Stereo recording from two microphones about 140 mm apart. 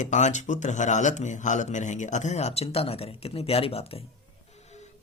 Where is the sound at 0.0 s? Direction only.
60° left (ahead or behind).